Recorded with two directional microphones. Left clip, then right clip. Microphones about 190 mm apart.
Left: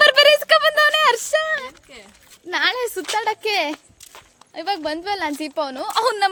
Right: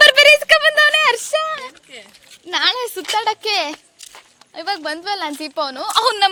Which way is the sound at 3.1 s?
10° left (ahead or behind).